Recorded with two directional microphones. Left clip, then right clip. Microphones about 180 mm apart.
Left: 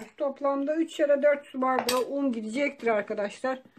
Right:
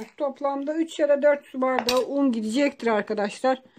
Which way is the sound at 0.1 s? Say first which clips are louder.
Right 1 dB; 55° right (ahead or behind).